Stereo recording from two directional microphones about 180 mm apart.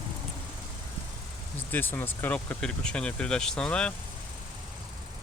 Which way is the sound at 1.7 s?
10° left (ahead or behind).